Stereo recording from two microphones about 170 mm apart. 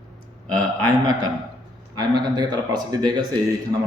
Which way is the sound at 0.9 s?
25° right (ahead or behind).